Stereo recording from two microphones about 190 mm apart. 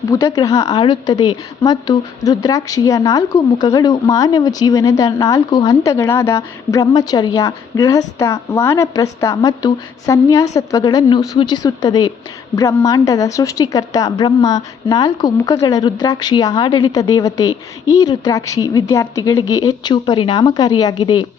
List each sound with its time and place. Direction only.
0.1 s a woman's voice: 15° left (ahead or behind)